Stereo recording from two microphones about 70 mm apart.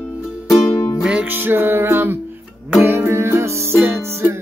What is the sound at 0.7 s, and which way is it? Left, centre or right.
Music, left.